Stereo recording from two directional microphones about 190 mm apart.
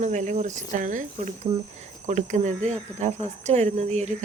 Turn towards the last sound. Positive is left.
turn(degrees=-35)  # may be behind; listen again after turning